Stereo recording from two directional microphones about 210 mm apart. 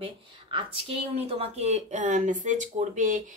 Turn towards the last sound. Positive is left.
turn(degrees=-35)  # may be behind; listen again after turning